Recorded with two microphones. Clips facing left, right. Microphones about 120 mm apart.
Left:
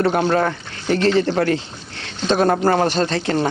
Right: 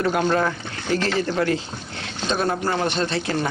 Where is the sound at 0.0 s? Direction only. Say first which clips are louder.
Left 3 dB; 35° left (ahead or behind).